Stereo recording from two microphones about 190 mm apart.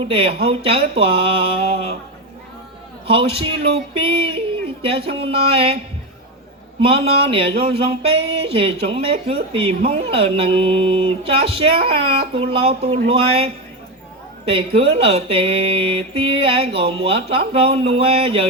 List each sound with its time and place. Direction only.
0.1 s speech: 30° right (ahead or behind)
3.1 s speech: 30° right (ahead or behind)
6.8 s speech: 30° right (ahead or behind)